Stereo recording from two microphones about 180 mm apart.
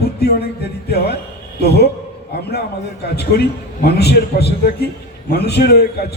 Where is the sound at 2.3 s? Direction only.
65° left (ahead or behind).